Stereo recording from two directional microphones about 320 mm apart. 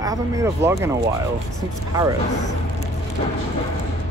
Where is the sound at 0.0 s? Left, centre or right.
Centre.